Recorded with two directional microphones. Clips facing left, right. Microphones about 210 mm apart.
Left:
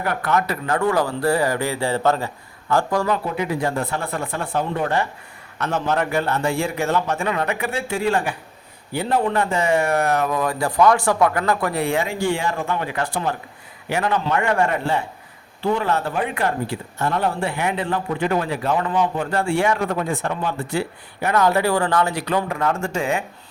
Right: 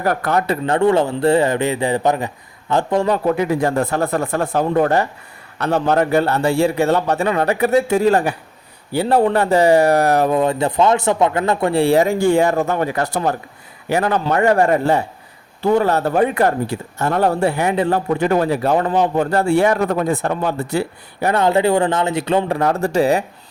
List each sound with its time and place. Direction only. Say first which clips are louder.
0.0 s a man's voice: right 3 dB; 40° right (ahead or behind); by 3.1 s 20° right (ahead or behind)
3.2 s a man's voice: right 6 dB; 45° right (ahead or behind)